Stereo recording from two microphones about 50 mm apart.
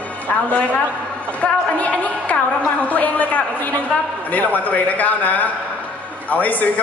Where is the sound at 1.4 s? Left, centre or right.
Left.